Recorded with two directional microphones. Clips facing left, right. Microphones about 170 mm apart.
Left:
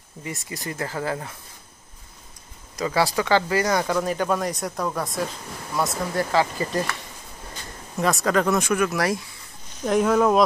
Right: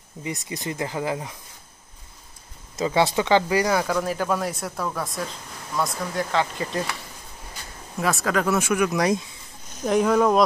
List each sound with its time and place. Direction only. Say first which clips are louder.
0.2 s speech: right 2 dB; 20° right (ahead or behind)
2.7 s speech: right 1 dB; 25° right (ahead or behind); by 7.0 s centre (ahead or behind)
8.0 s speech: left 2 dB; centre (ahead or behind); by 9.2 s 20° right (ahead or behind)
9.8 s speech: even; centre (ahead or behind)